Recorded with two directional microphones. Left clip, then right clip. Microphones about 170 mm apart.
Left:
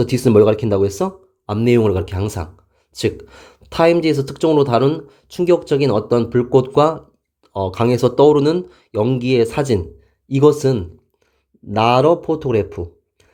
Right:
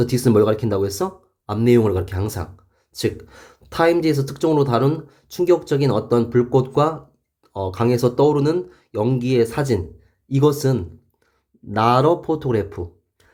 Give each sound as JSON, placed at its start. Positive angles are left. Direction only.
{"t": 0.0, "sound": "speech", "side_deg": 30}